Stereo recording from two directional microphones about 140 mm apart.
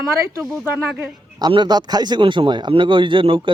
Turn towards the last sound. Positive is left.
turn(degrees=-35)  # may be behind; listen again after turning